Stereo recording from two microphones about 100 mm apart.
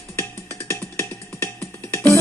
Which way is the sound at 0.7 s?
20° left (ahead or behind).